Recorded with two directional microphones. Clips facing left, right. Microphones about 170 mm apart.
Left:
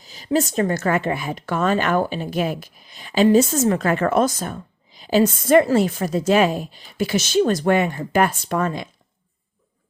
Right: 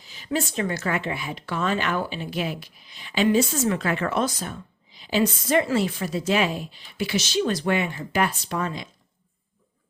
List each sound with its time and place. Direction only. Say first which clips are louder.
0.0 s a woman's voice: left 6 dB; 40° left (ahead or behind)